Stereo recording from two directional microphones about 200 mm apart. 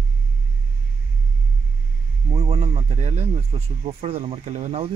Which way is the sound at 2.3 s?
30° right (ahead or behind).